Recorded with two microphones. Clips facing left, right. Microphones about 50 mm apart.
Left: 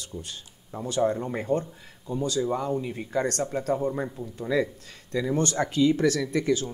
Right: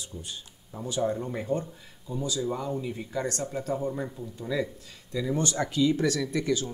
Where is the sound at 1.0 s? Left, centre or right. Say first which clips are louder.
Left 3 dB; left.